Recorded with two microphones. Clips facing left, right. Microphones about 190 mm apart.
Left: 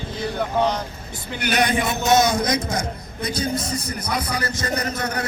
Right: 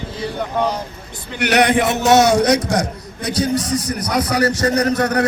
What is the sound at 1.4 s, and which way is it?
A man's voice, 75° right (ahead or behind).